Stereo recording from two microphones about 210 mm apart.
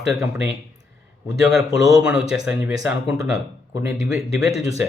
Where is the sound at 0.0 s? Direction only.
5° right (ahead or behind).